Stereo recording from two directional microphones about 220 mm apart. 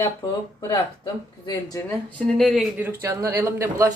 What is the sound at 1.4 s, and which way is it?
Speech, 15° left (ahead or behind).